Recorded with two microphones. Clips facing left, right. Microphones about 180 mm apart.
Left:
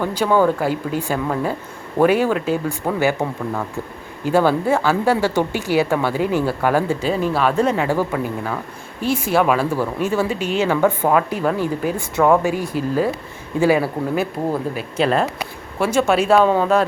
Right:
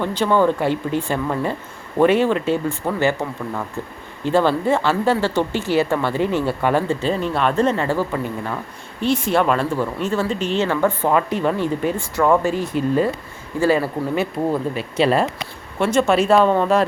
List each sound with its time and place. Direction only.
0.0 s speech: 10° left (ahead or behind)
4.3 s speech: 10° left (ahead or behind)
7.7 s speech: 15° left (ahead or behind)
8.1 s speech: 5° left (ahead or behind)
11.9 s speech: 15° left (ahead or behind); by 16.8 s centre (ahead or behind)